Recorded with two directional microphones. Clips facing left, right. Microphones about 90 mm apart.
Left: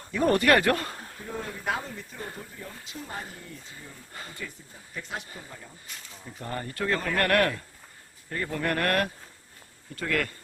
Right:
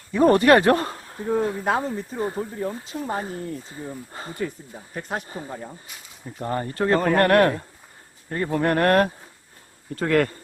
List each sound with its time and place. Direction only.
0.1 s speech: 30° right (ahead or behind)
4.4 s speech: 45° right (ahead or behind)
6.4 s speech: 30° right (ahead or behind)